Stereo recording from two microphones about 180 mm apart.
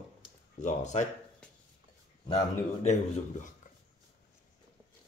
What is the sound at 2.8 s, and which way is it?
Speech, 40° left (ahead or behind).